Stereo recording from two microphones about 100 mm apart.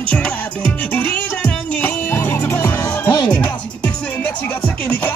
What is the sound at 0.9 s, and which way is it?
Music, 15° left (ahead or behind).